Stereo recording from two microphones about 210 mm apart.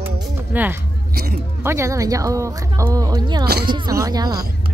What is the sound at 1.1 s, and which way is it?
Speech, 45° right (ahead or behind).